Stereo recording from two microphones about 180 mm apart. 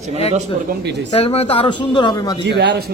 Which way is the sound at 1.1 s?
35° left (ahead or behind).